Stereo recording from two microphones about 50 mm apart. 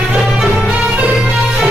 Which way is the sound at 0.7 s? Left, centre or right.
Right.